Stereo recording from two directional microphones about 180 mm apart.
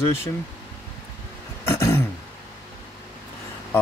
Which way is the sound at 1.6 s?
15° left (ahead or behind).